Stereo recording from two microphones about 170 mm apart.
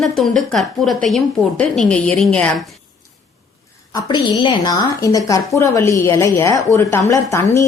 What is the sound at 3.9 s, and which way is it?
A woman's voice, 25° left (ahead or behind).